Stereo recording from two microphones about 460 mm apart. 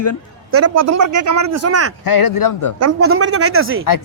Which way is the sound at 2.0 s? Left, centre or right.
Left.